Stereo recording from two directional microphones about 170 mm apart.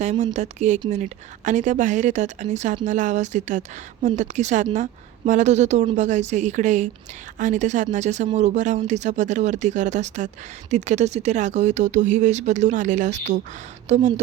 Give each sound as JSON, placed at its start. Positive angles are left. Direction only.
{"t": 0.0, "sound": "speech", "side_deg": -45}